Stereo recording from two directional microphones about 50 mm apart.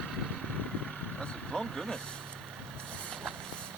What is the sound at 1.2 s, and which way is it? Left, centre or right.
Vehicle, centre.